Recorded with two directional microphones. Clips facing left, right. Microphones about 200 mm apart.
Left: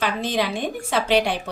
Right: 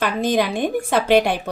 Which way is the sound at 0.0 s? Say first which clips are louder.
Right 4 dB; 50° right (ahead or behind).